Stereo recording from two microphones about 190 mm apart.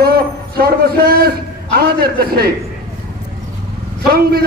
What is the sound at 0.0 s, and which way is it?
A man's voice, 55° right (ahead or behind).